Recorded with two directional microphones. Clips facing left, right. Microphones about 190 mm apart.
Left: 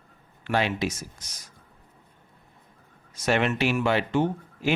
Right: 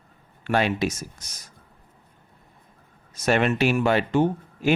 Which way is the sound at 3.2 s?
50° right (ahead or behind).